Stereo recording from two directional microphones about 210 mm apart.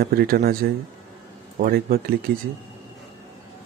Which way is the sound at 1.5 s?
45° right (ahead or behind).